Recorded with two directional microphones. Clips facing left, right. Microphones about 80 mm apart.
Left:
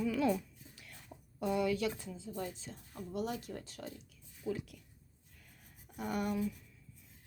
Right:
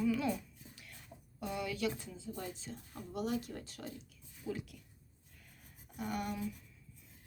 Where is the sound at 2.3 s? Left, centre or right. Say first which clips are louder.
Left 2 dB; centre.